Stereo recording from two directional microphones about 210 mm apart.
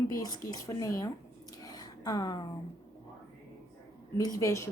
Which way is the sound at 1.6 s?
20° left (ahead or behind).